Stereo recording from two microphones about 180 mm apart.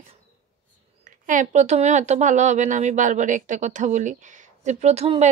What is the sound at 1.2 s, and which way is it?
A woman's voice, 45° right (ahead or behind).